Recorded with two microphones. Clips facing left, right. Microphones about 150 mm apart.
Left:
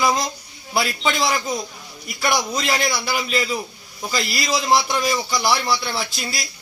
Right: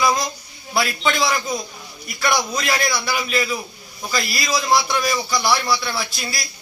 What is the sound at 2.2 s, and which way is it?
A man's voice, 20° left (ahead or behind).